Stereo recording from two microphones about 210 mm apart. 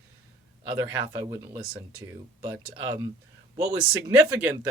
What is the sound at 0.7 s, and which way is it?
Speech, 20° right (ahead or behind).